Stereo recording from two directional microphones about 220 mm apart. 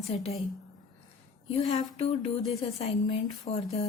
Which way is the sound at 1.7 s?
25° left (ahead or behind).